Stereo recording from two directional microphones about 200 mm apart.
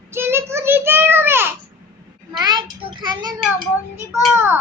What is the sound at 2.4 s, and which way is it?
Speech, 20° right (ahead or behind).